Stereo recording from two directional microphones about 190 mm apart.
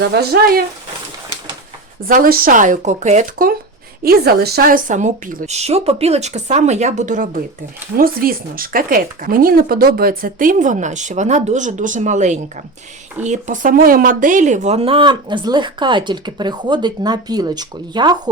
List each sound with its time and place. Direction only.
0.0 s speech: 60° right (ahead or behind)
2.0 s speech: 45° right (ahead or behind); by 18.2 s 20° right (ahead or behind)